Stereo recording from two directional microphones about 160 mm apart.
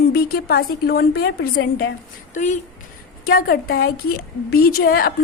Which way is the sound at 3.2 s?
65° left (ahead or behind).